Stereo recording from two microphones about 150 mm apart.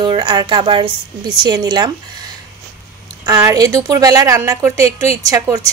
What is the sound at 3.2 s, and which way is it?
A woman's voice, 20° right (ahead or behind).